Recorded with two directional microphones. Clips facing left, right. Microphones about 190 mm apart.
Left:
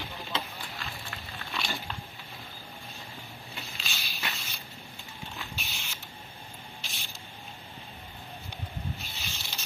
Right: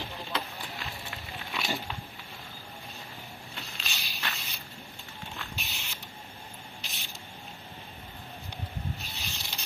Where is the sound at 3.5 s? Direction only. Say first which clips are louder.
Left 1 dB; centre (ahead or behind).